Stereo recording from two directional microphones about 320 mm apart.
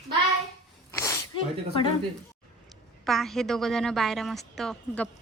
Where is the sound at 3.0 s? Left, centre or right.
Centre.